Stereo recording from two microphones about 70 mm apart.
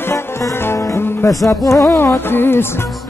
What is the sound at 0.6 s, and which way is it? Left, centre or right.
Music, left.